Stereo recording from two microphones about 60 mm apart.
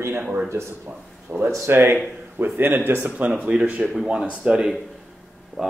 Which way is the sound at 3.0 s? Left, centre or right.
Right.